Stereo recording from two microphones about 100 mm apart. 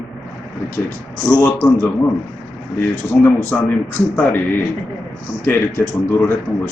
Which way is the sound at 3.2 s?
15° left (ahead or behind).